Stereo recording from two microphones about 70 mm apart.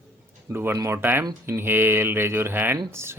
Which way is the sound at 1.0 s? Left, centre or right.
Right.